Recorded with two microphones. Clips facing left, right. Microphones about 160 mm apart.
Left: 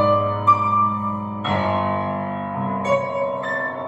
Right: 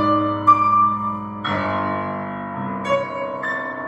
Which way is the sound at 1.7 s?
30° left (ahead or behind).